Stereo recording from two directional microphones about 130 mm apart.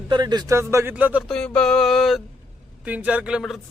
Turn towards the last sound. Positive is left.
turn(degrees=-10)  # may be behind; listen again after turning